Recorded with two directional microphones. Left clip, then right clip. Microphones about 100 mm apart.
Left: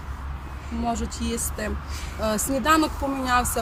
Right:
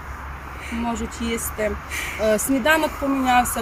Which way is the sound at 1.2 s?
50° left (ahead or behind).